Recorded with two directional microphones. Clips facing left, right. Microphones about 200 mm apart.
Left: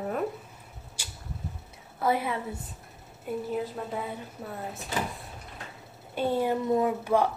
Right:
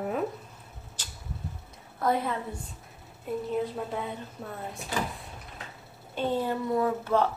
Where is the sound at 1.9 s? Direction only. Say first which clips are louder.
Even; 5° left (ahead or behind).